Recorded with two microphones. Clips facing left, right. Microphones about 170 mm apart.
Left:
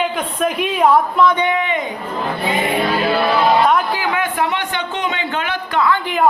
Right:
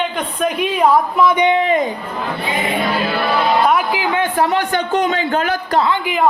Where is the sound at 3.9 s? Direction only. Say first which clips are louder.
Right 2 dB; 30° right (ahead or behind).